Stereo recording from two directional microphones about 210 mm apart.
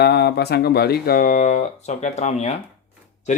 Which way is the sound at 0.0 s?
50° left (ahead or behind).